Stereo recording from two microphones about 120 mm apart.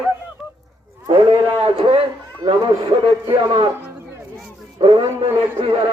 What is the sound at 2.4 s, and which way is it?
A man's voice, 40° right (ahead or behind).